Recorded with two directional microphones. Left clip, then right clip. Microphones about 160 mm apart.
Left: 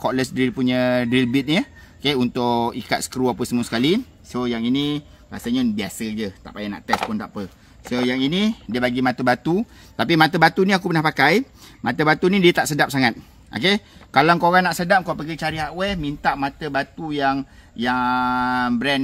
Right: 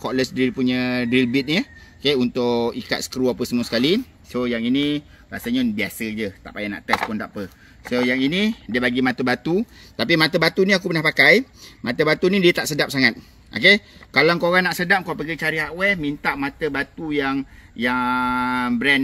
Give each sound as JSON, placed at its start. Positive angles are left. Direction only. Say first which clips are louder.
{"t": 0.0, "sound": "speech", "louder": "even", "side_deg": 85}
{"t": 4.3, "sound": "speech", "louder": "right 1 dB", "side_deg": 30}
{"t": 7.9, "sound": "speech", "louder": "right 1 dB", "side_deg": 30}
{"t": 14.5, "sound": "speech", "louder": "left 1 dB", "side_deg": 40}